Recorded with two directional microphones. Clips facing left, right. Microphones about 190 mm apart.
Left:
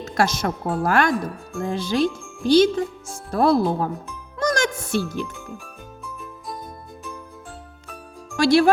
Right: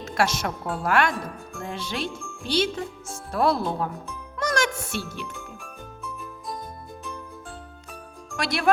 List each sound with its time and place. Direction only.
0.0 s a woman's voice: 35° left (ahead or behind)
4.4 s music: 35° left (ahead or behind)
8.4 s speech: 30° left (ahead or behind)